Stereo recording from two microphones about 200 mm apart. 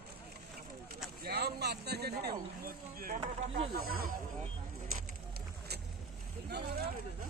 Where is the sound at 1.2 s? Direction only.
55° right (ahead or behind).